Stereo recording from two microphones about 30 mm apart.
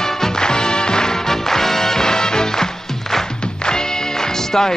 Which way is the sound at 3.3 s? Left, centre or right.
Left.